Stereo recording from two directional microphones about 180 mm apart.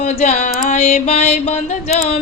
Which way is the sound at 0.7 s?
45° left (ahead or behind).